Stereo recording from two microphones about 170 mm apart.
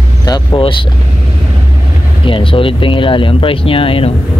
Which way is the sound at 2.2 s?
30° left (ahead or behind).